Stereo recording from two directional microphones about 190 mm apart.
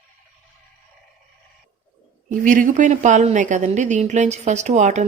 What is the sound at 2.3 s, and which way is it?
A woman's voice, 45° right (ahead or behind).